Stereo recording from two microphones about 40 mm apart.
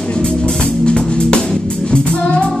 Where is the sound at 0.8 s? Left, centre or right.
Left.